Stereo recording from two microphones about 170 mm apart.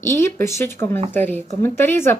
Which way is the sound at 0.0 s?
15° left (ahead or behind).